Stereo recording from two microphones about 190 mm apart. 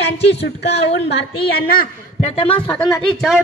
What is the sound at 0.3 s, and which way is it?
Speech, 65° left (ahead or behind).